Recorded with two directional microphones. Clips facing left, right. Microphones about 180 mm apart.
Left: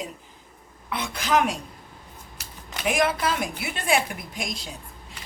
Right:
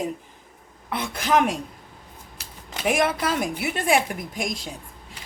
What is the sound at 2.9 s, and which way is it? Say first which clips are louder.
A woman's voice: right 1 dB; 50° right (ahead or behind).